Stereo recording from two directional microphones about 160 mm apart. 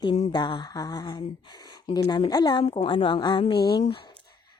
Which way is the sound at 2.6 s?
35° left (ahead or behind).